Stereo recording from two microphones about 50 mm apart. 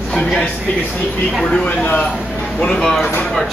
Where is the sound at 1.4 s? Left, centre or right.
Centre.